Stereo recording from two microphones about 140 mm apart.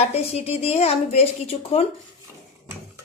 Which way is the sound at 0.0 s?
45° left (ahead or behind).